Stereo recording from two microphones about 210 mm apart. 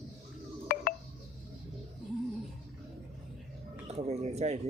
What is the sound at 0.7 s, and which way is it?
Telephone dialing, 45° left (ahead or behind).